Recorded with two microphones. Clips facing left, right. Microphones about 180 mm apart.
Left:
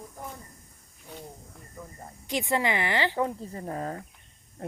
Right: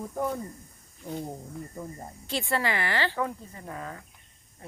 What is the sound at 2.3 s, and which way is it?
Speech, 15° left (ahead or behind).